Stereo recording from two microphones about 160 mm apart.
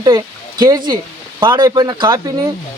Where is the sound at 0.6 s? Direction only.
25° right (ahead or behind).